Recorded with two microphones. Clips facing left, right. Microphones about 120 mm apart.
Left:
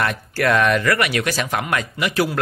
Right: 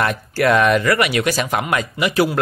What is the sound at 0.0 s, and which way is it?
Speech, 15° right (ahead or behind).